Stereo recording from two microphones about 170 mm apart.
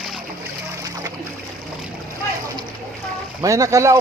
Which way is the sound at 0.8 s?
20° right (ahead or behind).